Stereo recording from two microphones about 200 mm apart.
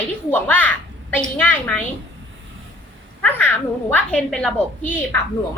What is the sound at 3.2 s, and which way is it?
A woman's voice, 10° left (ahead or behind).